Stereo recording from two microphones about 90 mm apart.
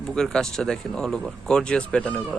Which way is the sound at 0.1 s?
5° left (ahead or behind).